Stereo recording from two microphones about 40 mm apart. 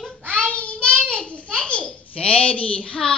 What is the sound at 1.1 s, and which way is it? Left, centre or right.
A child's voice, left.